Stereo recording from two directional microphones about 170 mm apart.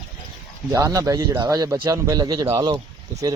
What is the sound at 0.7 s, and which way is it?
A man's voice, 20° right (ahead or behind).